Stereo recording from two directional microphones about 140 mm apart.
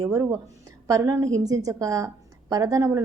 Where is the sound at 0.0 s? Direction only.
20° right (ahead or behind).